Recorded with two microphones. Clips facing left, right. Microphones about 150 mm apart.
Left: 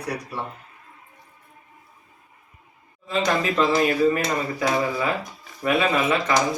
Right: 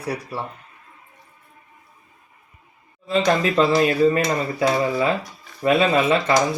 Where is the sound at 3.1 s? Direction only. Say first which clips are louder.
Right 4 dB; 35° right (ahead or behind).